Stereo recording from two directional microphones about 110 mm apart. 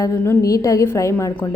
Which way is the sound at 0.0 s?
30° left (ahead or behind).